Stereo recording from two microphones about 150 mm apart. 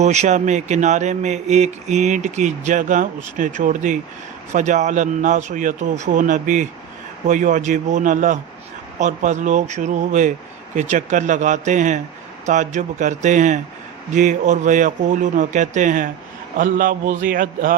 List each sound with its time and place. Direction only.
0.0 s speech: 50° right (ahead or behind); by 17.7 s 65° right (ahead or behind)